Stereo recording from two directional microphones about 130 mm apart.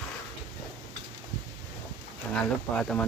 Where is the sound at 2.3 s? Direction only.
10° left (ahead or behind).